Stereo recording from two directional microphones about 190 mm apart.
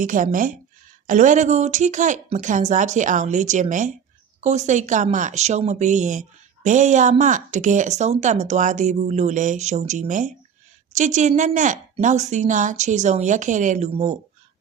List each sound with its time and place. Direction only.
0.0 s speech: 45° right (ahead or behind)